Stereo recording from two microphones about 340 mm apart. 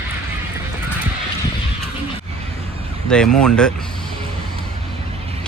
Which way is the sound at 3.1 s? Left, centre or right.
Centre.